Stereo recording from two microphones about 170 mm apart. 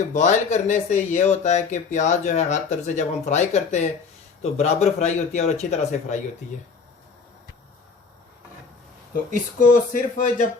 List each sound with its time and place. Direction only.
0.1 s speech: 45° left (ahead or behind)
9.3 s speech: 50° left (ahead or behind)